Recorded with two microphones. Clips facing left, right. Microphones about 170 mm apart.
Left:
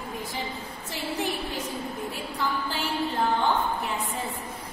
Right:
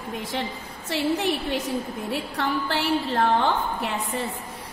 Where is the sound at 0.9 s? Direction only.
75° right (ahead or behind).